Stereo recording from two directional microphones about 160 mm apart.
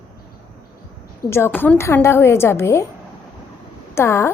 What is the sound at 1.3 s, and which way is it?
A woman's voice, 15° left (ahead or behind).